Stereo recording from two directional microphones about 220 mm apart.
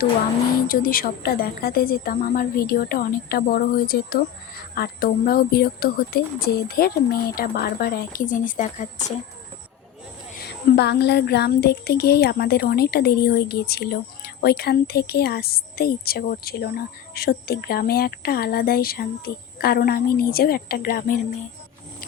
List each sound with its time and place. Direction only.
0.7 s speech: 40° left (ahead or behind)
10.3 s speech: 45° left (ahead or behind)